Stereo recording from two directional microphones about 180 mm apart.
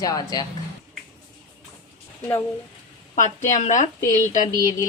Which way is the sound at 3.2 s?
45° left (ahead or behind).